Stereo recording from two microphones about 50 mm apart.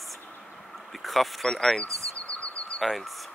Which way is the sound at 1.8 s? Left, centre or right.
Right.